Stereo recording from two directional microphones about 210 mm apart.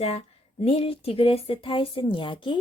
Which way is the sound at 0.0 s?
30° left (ahead or behind).